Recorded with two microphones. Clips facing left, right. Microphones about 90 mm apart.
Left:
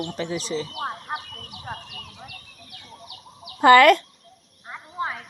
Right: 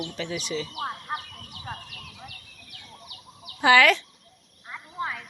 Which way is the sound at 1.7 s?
20° left (ahead or behind).